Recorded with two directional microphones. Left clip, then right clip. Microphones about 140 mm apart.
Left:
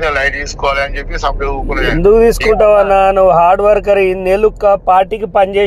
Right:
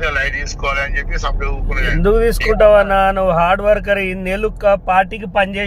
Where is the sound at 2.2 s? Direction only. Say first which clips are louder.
Left 4 dB; 30° left (ahead or behind).